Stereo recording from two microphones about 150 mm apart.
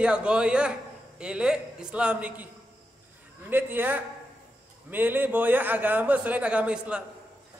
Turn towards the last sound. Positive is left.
turn(degrees=-5)  # may be behind; listen again after turning